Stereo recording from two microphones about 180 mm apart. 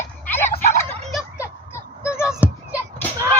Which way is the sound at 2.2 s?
5° right (ahead or behind).